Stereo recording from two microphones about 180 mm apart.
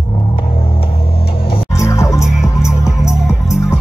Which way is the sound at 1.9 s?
15° left (ahead or behind).